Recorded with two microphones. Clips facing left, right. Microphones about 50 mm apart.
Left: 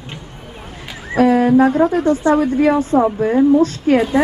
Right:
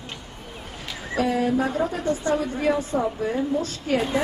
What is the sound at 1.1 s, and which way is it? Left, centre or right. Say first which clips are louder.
A woman's voice: left 10 dB; left.